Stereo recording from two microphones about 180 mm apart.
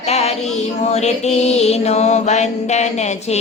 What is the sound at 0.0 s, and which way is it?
Female singing, 35° left (ahead or behind).